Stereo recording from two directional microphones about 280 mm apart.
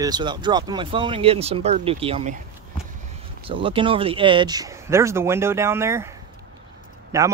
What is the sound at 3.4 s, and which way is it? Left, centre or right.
Speech, centre.